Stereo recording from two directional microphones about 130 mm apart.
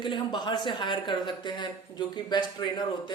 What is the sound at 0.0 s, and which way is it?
Speech, 35° left (ahead or behind).